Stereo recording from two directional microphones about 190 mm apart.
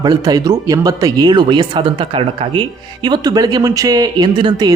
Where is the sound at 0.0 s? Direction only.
20° right (ahead or behind).